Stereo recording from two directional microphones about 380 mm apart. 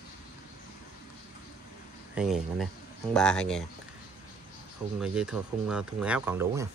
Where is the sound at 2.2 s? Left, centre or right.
Centre.